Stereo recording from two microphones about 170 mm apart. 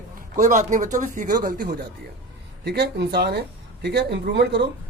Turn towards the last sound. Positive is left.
turn(degrees=-90)